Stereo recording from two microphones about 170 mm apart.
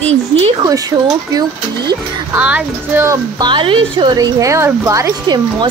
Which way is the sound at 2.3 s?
10° right (ahead or behind).